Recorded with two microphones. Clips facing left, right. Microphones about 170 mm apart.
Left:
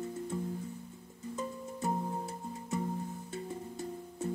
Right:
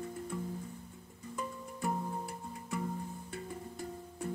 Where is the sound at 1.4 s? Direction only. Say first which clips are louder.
Left 1 dB; 25° left (ahead or behind).